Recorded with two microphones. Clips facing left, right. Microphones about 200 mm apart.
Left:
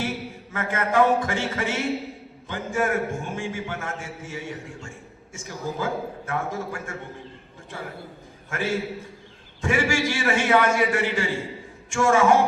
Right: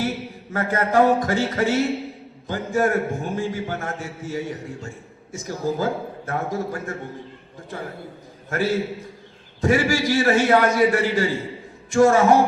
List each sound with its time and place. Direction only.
0.5 s a man's voice: 40° right (ahead or behind)
8.4 s a man's voice: 40° right (ahead or behind)